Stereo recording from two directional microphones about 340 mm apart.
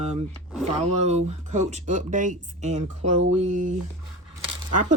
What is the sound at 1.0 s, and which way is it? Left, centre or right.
Speech, centre.